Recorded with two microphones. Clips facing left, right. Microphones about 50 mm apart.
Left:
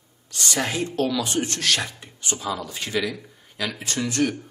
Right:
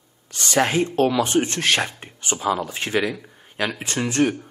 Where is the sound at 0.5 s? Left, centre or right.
Right.